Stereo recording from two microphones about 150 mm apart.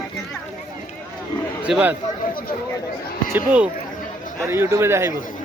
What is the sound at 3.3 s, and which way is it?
Speech, 10° right (ahead or behind).